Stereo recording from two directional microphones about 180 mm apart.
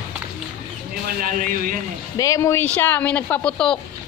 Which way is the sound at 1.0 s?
50° right (ahead or behind).